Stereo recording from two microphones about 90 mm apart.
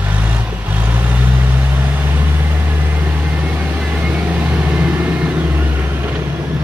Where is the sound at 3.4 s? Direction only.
10° right (ahead or behind).